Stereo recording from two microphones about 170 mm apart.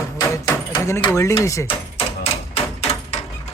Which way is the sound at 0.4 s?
20° left (ahead or behind).